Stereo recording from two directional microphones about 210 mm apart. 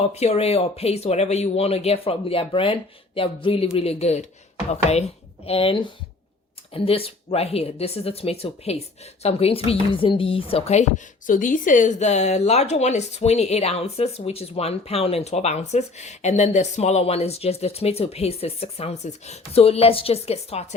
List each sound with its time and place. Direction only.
0.1 s speech: 30° left (ahead or behind)